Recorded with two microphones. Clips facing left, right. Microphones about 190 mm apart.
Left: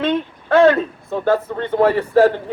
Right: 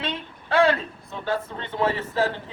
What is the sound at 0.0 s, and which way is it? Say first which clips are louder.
A man's voice: left 12 dB; 50° left (ahead or behind).